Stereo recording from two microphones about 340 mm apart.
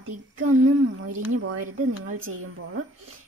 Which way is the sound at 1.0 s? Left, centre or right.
Right.